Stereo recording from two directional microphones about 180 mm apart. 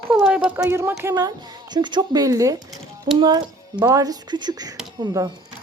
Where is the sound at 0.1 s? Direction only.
5° right (ahead or behind).